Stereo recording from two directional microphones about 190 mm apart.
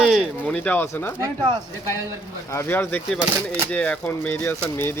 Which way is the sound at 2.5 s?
15° left (ahead or behind).